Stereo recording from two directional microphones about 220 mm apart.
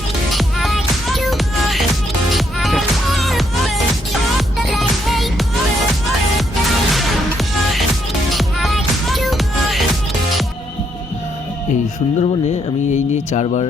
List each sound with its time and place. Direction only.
0.3 s music: centre (ahead or behind)
6.9 s music: centre (ahead or behind)
12.2 s a sound: 30° left (ahead or behind)